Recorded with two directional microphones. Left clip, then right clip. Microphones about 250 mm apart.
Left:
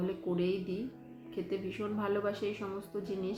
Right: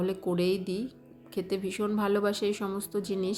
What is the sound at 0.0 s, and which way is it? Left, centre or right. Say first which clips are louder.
A woman's voice: right 5 dB; right.